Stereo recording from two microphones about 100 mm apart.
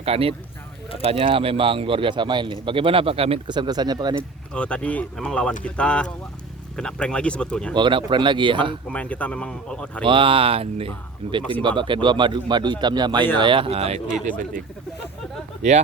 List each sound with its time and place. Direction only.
0.0 s speech: 80° right
1.1 s speech: 65° right (ahead or behind)
3.5 s speech: 45° right (ahead or behind)
4.5 s speech: 10° left (ahead or behind)
7.8 s speech: 55° right (ahead or behind)
8.9 s speech: 15° left (ahead or behind)
10.0 s speech: 60° right (ahead or behind)
11.6 s speech: 55° right (ahead or behind); by 14.0 s 85° right